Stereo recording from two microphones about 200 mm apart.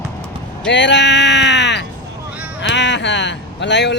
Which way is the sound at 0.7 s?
60° left (ahead or behind).